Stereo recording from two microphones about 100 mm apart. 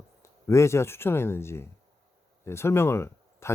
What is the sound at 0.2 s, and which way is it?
Speech, 30° left (ahead or behind).